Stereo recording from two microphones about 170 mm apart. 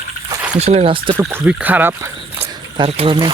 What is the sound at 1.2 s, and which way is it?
Speech, 15° right (ahead or behind).